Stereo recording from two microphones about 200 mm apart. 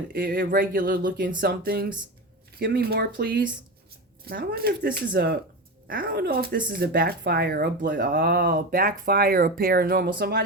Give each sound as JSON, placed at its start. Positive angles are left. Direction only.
{"t": 0.1, "sound": "speech", "side_deg": -50}